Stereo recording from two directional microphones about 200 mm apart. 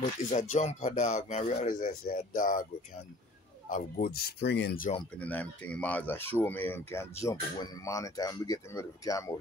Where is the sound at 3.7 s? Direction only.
45° left (ahead or behind).